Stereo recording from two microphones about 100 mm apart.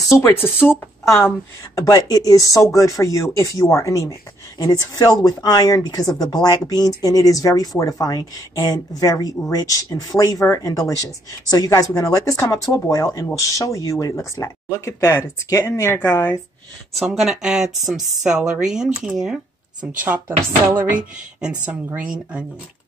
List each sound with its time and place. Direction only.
0.1 s speech: 25° left (ahead or behind)
1.8 s speech: 35° left (ahead or behind)
4.6 s speech: 40° left (ahead or behind); by 16.3 s 25° left (ahead or behind)
16.9 s speech: centre (ahead or behind)
20.0 s speech: 20° right (ahead or behind)